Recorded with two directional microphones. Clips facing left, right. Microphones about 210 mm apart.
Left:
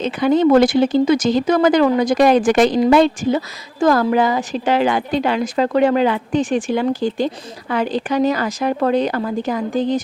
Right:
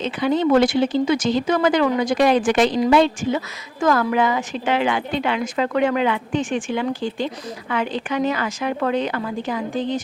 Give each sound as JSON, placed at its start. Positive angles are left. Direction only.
{"t": 0.0, "sound": "speech", "side_deg": 45}